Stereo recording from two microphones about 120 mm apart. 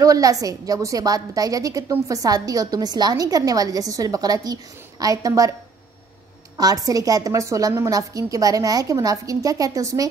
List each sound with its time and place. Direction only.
0.0 s a woman's voice: 30° right (ahead or behind)
6.5 s a woman's voice: 30° right (ahead or behind)